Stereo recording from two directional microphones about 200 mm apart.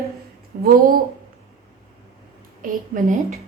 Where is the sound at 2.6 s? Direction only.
40° right (ahead or behind).